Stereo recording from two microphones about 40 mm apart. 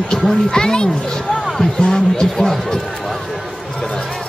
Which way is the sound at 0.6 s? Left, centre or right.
Centre.